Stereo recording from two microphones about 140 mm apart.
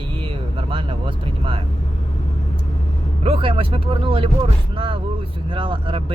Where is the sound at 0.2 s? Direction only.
40° right (ahead or behind).